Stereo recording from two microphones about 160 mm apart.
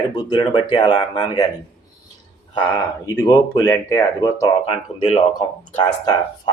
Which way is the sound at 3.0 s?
20° left (ahead or behind).